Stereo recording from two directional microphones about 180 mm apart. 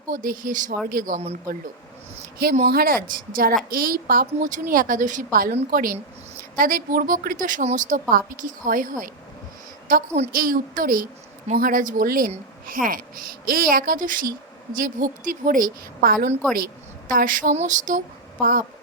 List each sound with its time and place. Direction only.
0.1 s a woman's voice: 50° right (ahead or behind)
2.6 s a woman's voice: 55° right (ahead or behind)